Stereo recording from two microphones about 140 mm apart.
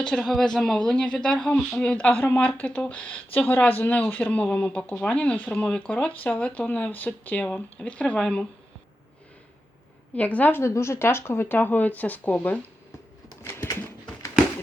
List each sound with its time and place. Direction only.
0.1 s speech: 5° left (ahead or behind)
10.2 s speech: 10° left (ahead or behind)
13.2 s a sound: 20° left (ahead or behind)